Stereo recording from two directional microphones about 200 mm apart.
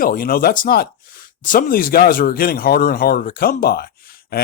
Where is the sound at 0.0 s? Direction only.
45° left (ahead or behind).